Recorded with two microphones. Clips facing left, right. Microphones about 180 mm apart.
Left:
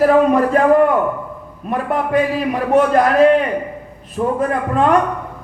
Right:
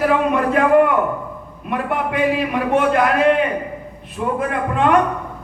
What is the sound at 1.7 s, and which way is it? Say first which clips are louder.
A man's voice: left 3 dB; 40° left (ahead or behind).